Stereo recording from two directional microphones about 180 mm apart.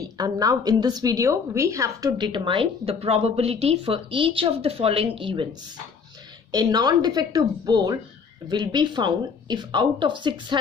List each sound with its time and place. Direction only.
0.2 s a woman's voice: 20° right (ahead or behind)